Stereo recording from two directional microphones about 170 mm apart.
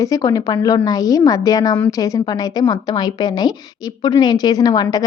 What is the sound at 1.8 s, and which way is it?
Speech, 10° left (ahead or behind).